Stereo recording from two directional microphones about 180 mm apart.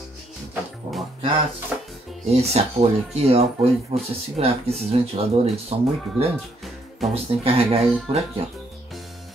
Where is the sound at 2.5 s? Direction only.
35° right (ahead or behind).